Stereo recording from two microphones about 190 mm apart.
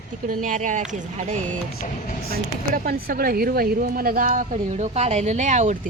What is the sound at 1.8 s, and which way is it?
Speech, 45° left (ahead or behind).